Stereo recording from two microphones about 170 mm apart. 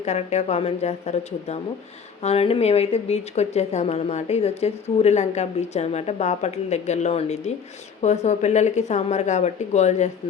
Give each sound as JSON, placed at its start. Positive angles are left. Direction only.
{"t": 0.0, "sound": "speech", "side_deg": 40}